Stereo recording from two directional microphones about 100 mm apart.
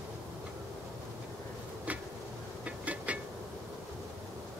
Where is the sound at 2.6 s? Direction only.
15° right (ahead or behind).